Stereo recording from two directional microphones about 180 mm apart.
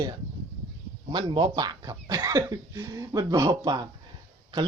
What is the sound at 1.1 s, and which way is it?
Speech, 25° right (ahead or behind).